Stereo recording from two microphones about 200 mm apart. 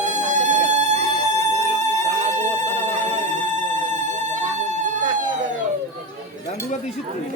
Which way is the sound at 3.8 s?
40° right (ahead or behind).